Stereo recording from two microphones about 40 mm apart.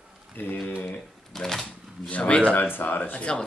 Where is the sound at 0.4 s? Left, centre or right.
Left.